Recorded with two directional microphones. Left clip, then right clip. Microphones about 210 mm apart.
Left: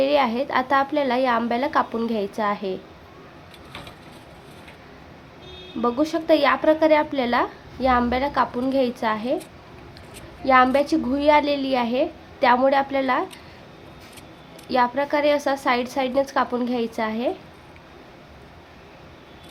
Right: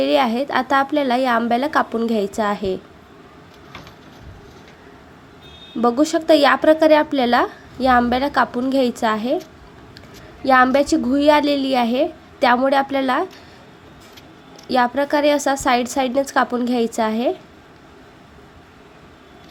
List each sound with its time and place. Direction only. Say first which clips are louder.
0.0 s a woman's voice: right 2 dB; 15° right (ahead or behind)
5.8 s a woman's voice: right 5 dB; 20° right (ahead or behind)
10.4 s a woman's voice: right 3 dB; 20° right (ahead or behind)
14.7 s a woman's voice: right 3 dB; 15° right (ahead or behind)